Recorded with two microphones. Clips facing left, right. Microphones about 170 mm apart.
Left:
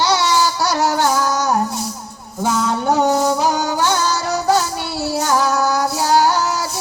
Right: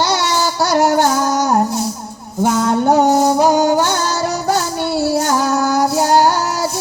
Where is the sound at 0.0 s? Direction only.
50° right (ahead or behind).